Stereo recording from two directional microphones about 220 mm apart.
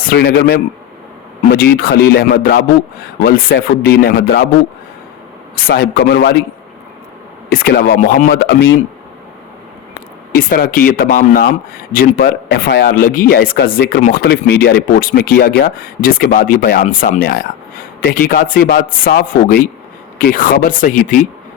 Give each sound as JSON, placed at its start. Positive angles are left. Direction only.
{"t": 0.0, "sound": "speech", "side_deg": 45}
{"t": 5.5, "sound": "speech", "side_deg": 45}
{"t": 7.5, "sound": "speech", "side_deg": 45}
{"t": 10.3, "sound": "speech", "side_deg": 40}